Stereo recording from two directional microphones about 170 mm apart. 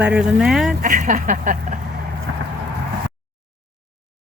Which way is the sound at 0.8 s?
50° right (ahead or behind).